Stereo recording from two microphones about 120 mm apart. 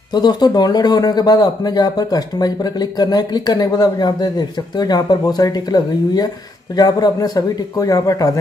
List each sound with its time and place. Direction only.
0.1 s speech: 35° left (ahead or behind)